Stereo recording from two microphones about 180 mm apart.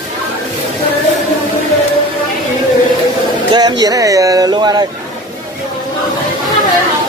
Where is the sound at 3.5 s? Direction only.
20° right (ahead or behind).